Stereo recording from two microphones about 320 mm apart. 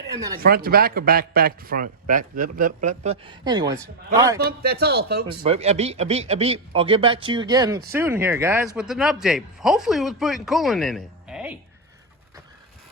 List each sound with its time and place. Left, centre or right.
0.1 s speech: centre
0.3 s a man's voice: right; by 4.4 s centre
4.4 s a man's voice: right
5.4 s a man's voice: centre